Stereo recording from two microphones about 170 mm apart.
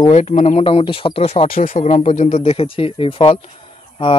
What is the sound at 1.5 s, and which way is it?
Speech, 45° left (ahead or behind).